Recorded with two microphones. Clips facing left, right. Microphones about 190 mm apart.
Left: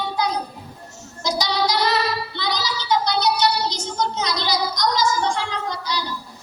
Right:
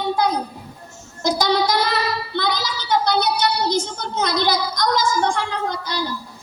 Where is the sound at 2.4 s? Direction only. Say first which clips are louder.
Right 2 dB; 55° right (ahead or behind).